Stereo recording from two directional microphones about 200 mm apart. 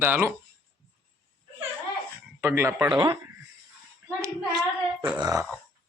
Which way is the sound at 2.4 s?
10° right (ahead or behind).